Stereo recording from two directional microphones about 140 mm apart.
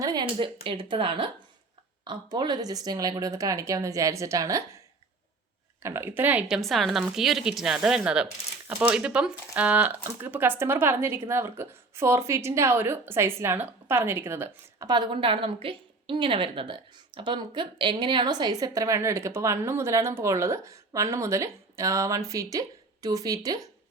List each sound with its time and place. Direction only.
0.0 s a woman's voice: 30° right (ahead or behind)
5.8 s speech: 15° right (ahead or behind)
6.6 s speech: centre (ahead or behind); by 14.8 s 15° right (ahead or behind)
14.8 s a woman's voice: 35° right (ahead or behind)